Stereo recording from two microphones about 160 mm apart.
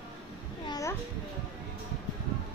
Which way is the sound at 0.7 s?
20° left (ahead or behind).